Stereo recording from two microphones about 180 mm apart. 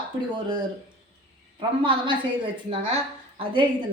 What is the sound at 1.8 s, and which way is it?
Speech, 30° right (ahead or behind).